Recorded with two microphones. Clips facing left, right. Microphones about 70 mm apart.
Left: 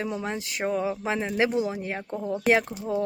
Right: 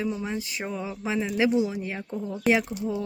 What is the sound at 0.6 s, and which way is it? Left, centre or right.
A woman's voice, left.